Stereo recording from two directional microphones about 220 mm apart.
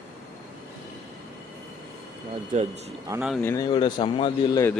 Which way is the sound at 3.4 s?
15° left (ahead or behind).